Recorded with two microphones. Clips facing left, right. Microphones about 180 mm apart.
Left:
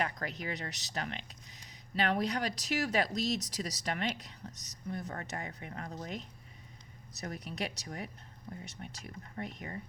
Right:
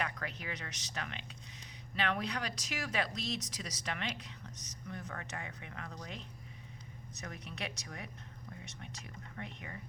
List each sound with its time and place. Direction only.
0.0 s speech: 35° left (ahead or behind)